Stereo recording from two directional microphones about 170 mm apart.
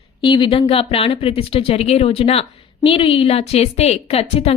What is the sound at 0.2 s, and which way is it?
Speech, 30° left (ahead or behind).